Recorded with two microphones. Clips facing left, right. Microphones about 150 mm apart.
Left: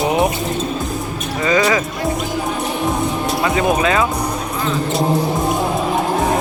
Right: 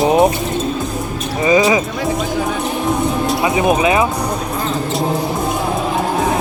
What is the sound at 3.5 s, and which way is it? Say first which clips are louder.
Music: right 2 dB; 20° right (ahead or behind).